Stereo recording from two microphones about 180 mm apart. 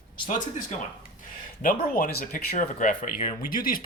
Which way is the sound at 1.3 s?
50° left (ahead or behind).